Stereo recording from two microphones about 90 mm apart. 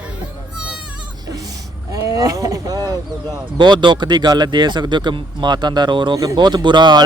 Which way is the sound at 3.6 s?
60° right (ahead or behind).